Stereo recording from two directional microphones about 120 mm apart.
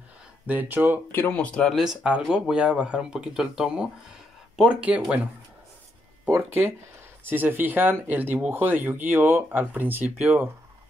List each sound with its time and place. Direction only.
0.5 s speech: 15° right (ahead or behind)
1.1 s speech: 15° left (ahead or behind)
2.0 s speech: 10° right (ahead or behind)
6.2 s speech: 20° right (ahead or behind)